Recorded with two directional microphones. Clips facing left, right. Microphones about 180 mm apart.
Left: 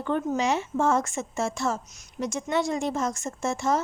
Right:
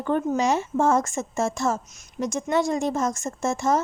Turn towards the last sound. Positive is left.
turn(degrees=-45)  # may be behind; listen again after turning